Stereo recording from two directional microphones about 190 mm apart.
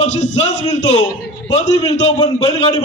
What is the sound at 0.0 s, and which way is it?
Speech, 35° left (ahead or behind).